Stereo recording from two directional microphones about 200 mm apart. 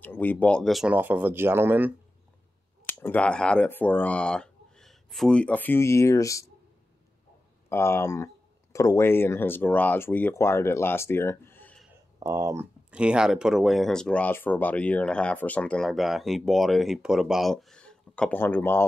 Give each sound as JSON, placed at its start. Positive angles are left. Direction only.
{"t": 0.0, "sound": "speech", "side_deg": 10}
{"t": 2.9, "sound": "speech", "side_deg": 10}
{"t": 7.7, "sound": "speech", "side_deg": 15}
{"t": 12.2, "sound": "speech", "side_deg": -15}
{"t": 12.9, "sound": "speech", "side_deg": -5}